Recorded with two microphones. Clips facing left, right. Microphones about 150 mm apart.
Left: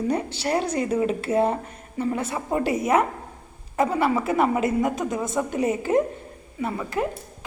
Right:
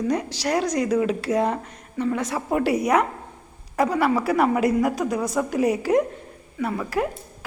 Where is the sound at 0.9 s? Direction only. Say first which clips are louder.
Right 1 dB; 5° left (ahead or behind).